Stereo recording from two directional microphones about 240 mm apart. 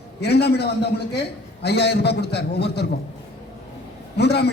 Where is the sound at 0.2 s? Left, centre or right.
Left.